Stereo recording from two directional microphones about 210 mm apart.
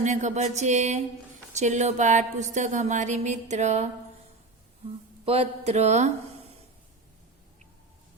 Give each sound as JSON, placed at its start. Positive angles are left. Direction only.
{"t": 0.0, "sound": "a woman's voice", "side_deg": -35}
{"t": 4.9, "sound": "speech", "side_deg": -25}